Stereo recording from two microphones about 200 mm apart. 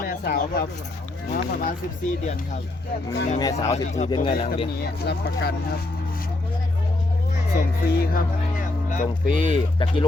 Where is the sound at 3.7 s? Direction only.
35° left (ahead or behind).